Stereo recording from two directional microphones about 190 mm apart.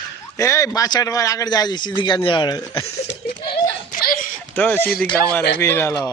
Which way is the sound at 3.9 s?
45° left (ahead or behind).